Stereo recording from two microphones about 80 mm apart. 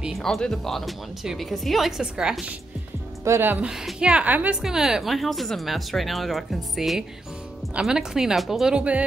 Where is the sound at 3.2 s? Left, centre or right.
Right.